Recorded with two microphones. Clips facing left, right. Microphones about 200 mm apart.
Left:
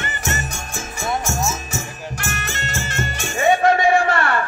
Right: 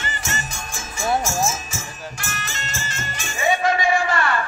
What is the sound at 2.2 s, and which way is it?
Music, 60° left (ahead or behind).